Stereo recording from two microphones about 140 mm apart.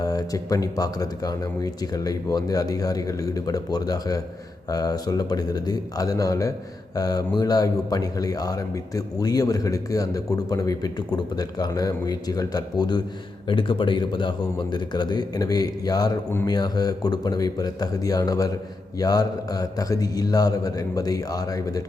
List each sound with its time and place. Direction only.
0.0 s speech: 25° left (ahead or behind)